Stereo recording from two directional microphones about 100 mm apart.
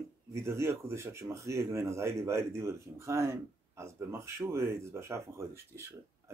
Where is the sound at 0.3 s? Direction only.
25° right (ahead or behind).